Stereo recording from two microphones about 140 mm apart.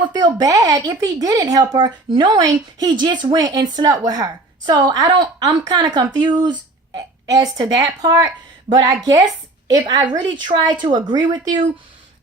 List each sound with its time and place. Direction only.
0.1 s a woman's voice: 30° right (ahead or behind)